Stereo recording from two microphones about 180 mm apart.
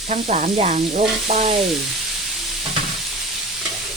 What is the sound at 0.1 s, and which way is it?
Frying, 40° right (ahead or behind).